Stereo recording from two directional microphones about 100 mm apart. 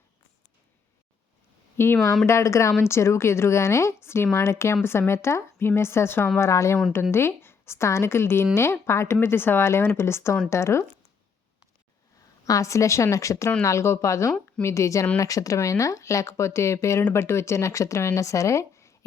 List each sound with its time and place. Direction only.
1.7 s speech: 25° left (ahead or behind)
12.5 s a woman's voice: 30° left (ahead or behind)